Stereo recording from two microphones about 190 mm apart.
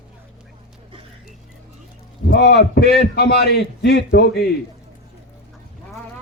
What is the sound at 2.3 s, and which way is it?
A man's voice, 60° left (ahead or behind).